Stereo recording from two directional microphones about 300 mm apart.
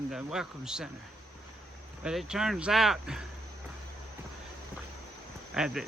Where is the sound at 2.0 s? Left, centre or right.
Centre.